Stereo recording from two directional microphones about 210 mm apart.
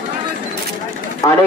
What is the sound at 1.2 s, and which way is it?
Speech, 15° left (ahead or behind).